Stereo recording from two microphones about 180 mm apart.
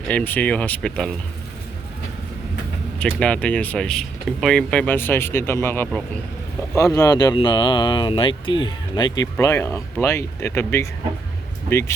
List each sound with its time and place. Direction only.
0.1 s speech: 10° left (ahead or behind)
3.0 s speech: 5° left (ahead or behind)